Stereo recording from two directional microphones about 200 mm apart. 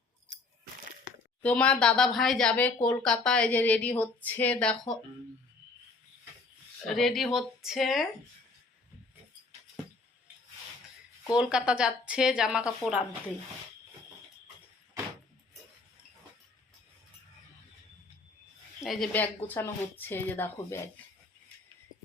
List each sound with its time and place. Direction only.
1.4 s speech: 5° left (ahead or behind)
6.8 s speech: centre (ahead or behind)
11.3 s speech: 5° right (ahead or behind)
18.9 s speech: 5° left (ahead or behind)